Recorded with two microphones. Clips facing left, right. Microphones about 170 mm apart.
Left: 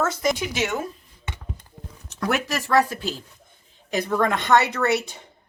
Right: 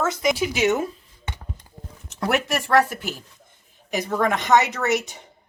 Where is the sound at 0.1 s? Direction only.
20° right (ahead or behind).